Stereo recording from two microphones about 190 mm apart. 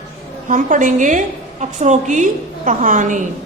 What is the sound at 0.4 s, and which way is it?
A woman's voice, 45° right (ahead or behind).